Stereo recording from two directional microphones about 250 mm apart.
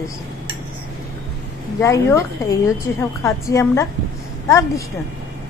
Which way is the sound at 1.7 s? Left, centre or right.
Centre.